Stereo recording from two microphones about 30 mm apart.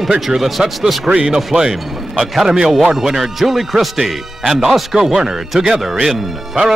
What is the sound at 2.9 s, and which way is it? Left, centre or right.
Speech, centre.